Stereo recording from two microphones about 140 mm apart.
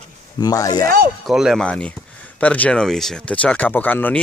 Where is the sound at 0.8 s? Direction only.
90° right.